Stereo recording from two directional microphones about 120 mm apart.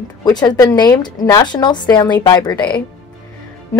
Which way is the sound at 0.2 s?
35° left (ahead or behind).